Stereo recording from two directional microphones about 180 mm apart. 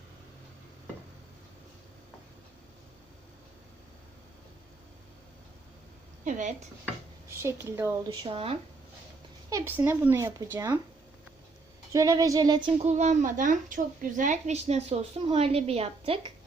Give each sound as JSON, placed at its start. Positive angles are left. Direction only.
{"t": 6.2, "sound": "speech", "side_deg": -45}
{"t": 7.3, "sound": "speech", "side_deg": -15}
{"t": 8.0, "sound": "speech", "side_deg": -25}
{"t": 9.5, "sound": "speech", "side_deg": -15}
{"t": 11.9, "sound": "speech", "side_deg": -20}
{"t": 12.8, "sound": "a woman's voice", "side_deg": -40}